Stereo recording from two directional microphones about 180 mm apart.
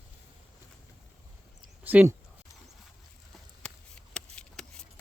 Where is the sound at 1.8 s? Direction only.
10° right (ahead or behind).